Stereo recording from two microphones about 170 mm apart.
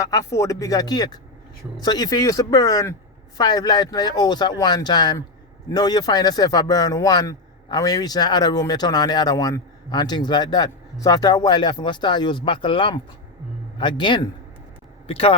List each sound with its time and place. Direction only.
0.0 s a man's voice: 20° left (ahead or behind); by 15.4 s 35° left (ahead or behind)